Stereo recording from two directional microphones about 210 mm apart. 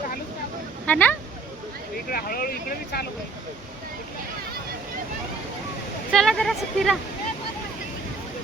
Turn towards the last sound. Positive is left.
turn(degrees=0)  # may be behind; listen again after turning